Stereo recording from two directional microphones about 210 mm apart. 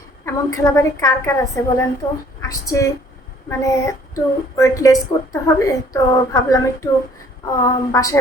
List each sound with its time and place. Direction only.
0.3 s speech: 15° left (ahead or behind)
2.4 s a sound: 15° left (ahead or behind)
3.5 s speech: 15° left (ahead or behind)